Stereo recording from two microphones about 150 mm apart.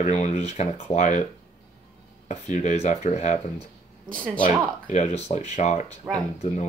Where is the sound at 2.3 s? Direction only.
50° left (ahead or behind).